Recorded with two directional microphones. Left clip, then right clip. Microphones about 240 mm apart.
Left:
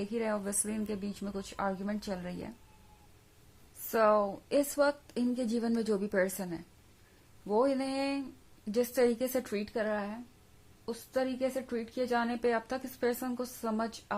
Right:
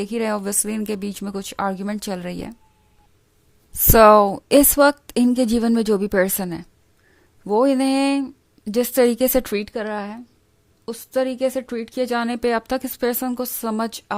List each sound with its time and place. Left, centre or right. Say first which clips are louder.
0.0 s a woman's voice: right 11 dB; right
3.9 s speech: right 16 dB; right